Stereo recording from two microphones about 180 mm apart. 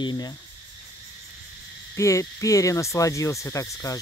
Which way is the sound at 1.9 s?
15° left (ahead or behind).